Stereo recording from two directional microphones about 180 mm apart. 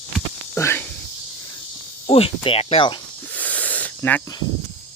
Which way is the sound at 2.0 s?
30° left (ahead or behind).